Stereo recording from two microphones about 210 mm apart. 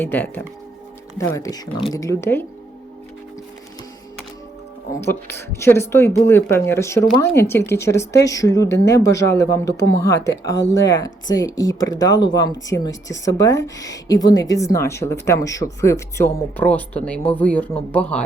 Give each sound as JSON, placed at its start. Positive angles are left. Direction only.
{"t": 0.0, "sound": "speech", "side_deg": 10}
{"t": 4.9, "sound": "a man's voice", "side_deg": 10}